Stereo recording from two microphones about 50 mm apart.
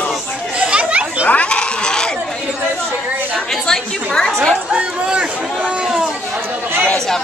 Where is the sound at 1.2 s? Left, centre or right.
Left.